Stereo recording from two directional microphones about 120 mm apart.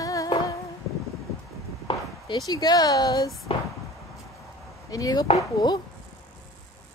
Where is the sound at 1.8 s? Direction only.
35° left (ahead or behind).